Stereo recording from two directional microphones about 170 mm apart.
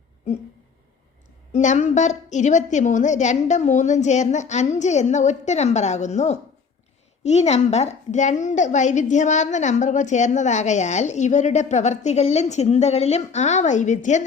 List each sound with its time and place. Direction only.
1.5 s a woman's voice: 45° left (ahead or behind)